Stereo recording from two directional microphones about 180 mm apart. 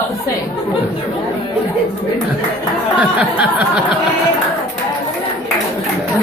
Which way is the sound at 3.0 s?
5° right (ahead or behind).